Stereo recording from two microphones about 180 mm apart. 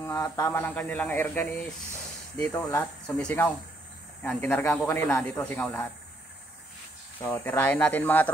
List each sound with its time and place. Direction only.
0.0 s speech: 15° left (ahead or behind)
7.2 s speech: 15° left (ahead or behind)